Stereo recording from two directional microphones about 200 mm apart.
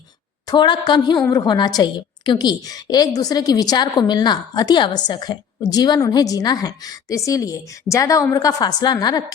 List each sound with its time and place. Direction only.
0.4 s a woman's voice: 25° left (ahead or behind)